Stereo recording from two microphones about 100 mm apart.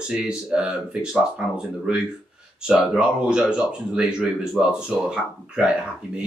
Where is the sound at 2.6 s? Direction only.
10° right (ahead or behind).